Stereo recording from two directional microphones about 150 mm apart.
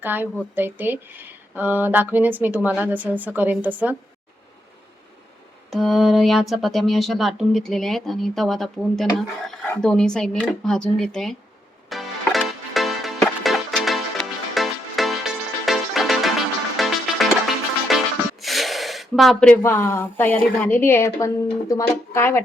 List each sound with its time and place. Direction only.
0.0 s speech: 10° right (ahead or behind)
5.7 s speech: centre (ahead or behind)
11.9 s music: centre (ahead or behind)
18.3 s a sound: centre (ahead or behind)
19.6 s a woman's voice: 15° left (ahead or behind)